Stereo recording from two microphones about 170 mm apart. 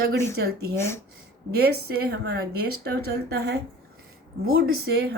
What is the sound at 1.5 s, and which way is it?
Speech, 70° right (ahead or behind).